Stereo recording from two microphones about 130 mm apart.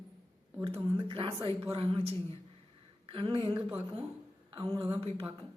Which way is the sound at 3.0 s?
45° right (ahead or behind).